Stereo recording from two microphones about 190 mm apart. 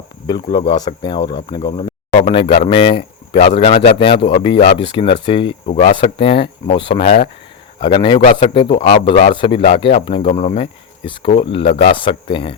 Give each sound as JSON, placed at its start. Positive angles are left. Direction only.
{"t": 0.3, "sound": "speech", "side_deg": 25}